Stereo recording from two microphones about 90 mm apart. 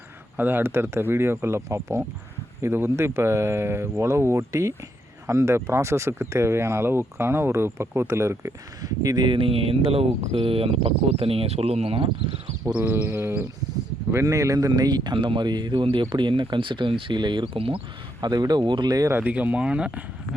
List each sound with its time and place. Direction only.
0.3 s speech: 25° right (ahead or behind); by 12.3 s 85° right
12.7 s a man's voice: 20° right (ahead or behind); by 17.7 s 80° right
18.2 s speech: 50° right (ahead or behind)
19.1 s speech: 15° right (ahead or behind)